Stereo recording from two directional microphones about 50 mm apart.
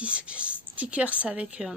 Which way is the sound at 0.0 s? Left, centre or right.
Right.